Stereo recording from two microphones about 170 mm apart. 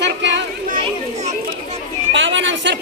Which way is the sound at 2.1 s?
90° right.